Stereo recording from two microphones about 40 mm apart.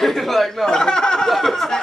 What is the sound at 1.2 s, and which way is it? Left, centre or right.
Speech, centre.